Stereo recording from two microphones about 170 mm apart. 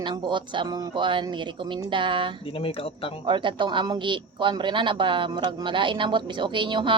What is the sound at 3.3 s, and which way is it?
Speech, 30° right (ahead or behind).